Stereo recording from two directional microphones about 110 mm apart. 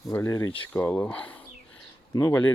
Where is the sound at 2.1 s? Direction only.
35° left (ahead or behind).